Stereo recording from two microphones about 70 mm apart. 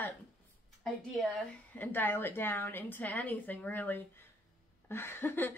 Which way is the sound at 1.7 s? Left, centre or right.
Left.